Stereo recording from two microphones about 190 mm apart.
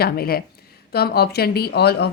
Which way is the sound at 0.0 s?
55° left (ahead or behind).